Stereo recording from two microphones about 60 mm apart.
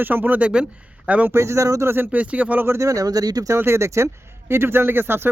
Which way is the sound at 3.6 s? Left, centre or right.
Right.